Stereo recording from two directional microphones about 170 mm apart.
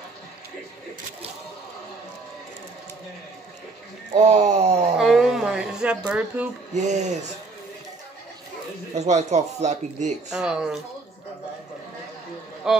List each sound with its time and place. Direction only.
4.1 s speech: 40° right (ahead or behind)
4.9 s a sound: centre (ahead or behind)
6.7 s speech: 45° right (ahead or behind)
8.9 s speech: 40° right (ahead or behind)
10.3 s speech: 5° right (ahead or behind)
12.7 s speech: 5° right (ahead or behind)